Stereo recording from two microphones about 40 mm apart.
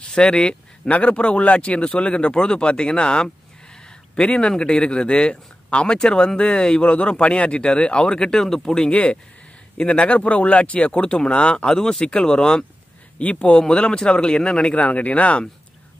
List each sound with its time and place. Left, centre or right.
0.1 s speech: left
8.9 s speech: left; by 12.6 s centre
13.2 s speech: left